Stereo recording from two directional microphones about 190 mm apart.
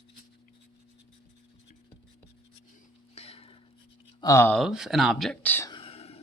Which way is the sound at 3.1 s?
30° left (ahead or behind).